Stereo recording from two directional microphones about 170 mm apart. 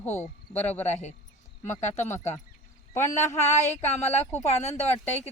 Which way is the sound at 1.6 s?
45° left (ahead or behind).